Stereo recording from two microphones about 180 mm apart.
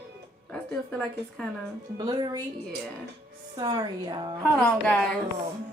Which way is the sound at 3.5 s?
25° right (ahead or behind).